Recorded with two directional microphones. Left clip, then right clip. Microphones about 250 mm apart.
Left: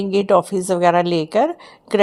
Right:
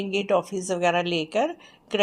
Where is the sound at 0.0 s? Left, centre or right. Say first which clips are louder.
Left 8 dB; left.